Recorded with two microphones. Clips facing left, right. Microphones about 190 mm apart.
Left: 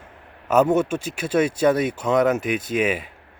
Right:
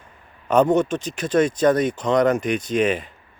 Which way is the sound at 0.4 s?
5° left (ahead or behind).